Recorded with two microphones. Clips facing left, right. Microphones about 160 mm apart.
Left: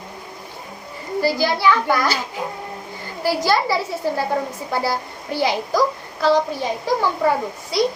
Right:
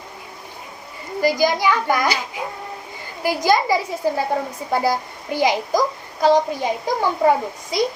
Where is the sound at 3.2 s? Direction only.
15° right (ahead or behind).